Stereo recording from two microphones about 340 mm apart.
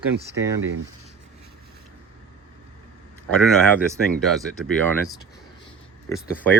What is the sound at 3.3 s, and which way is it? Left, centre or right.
Speech, centre.